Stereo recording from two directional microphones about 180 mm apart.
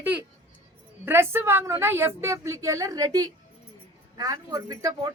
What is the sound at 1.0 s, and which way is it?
A woman's voice, 15° right (ahead or behind).